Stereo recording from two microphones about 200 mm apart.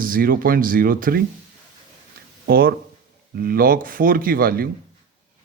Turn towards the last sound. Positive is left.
turn(degrees=-45)  # may be behind; listen again after turning